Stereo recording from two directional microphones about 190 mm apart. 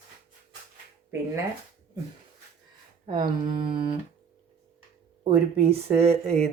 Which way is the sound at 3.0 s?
25° right (ahead or behind).